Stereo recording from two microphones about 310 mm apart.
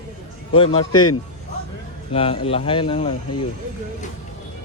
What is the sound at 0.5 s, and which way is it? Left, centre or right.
Speech, centre.